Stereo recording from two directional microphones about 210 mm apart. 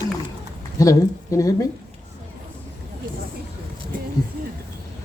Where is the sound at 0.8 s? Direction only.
15° left (ahead or behind).